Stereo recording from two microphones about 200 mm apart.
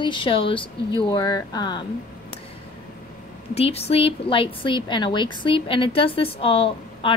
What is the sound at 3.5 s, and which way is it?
A woman's voice, 30° left (ahead or behind).